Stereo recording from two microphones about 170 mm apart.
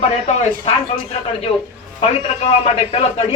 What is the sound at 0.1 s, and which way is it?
Speech, 40° left (ahead or behind).